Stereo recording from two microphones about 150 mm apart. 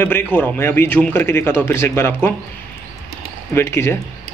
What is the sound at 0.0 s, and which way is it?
Speech, 10° left (ahead or behind).